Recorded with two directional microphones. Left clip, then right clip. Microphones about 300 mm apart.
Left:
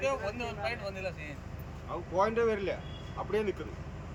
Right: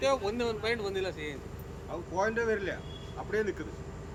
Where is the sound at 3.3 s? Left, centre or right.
Centre.